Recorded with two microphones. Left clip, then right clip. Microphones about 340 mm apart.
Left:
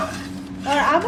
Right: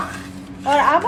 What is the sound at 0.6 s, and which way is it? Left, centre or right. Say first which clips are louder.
Speech: right 3 dB; right.